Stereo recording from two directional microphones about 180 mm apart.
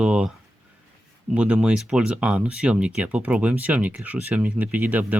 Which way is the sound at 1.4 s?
5° right (ahead or behind).